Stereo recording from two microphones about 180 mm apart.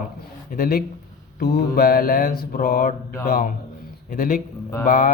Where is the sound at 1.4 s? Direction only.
65° left (ahead or behind).